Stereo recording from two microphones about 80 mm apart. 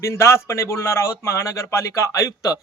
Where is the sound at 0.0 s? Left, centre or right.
Left.